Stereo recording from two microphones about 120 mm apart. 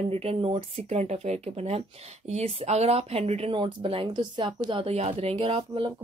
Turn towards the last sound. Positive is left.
turn(degrees=-50)  # may be behind; listen again after turning